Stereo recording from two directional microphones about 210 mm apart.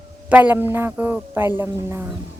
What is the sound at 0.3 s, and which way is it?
Speech, 5° right (ahead or behind).